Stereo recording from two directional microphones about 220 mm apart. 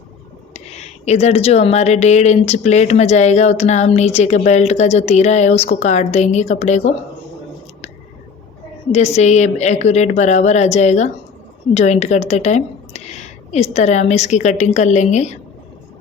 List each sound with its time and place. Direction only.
0.5 s speech: 30° left (ahead or behind)
8.9 s speech: 30° left (ahead or behind)